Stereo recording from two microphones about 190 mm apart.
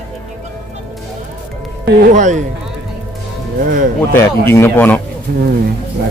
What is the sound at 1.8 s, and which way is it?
Speech, 60° right (ahead or behind).